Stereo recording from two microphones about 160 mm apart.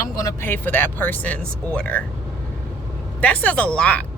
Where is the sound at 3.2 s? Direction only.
10° left (ahead or behind).